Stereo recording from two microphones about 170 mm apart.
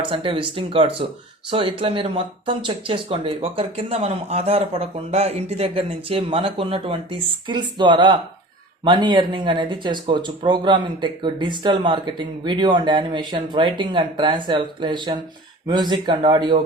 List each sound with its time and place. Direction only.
0.0 s speech: 30° right (ahead or behind)